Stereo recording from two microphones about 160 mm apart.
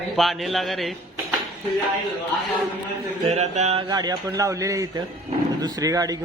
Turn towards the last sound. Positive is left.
turn(degrees=-20)  # may be behind; listen again after turning